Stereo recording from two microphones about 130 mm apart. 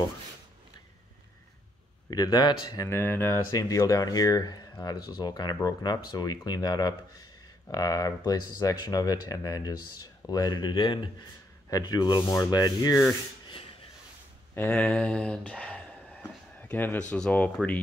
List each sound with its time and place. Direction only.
2.0 s speech: 30° left (ahead or behind)
14.5 s a sound: 10° left (ahead or behind)
17.1 s speech: 10° left (ahead or behind)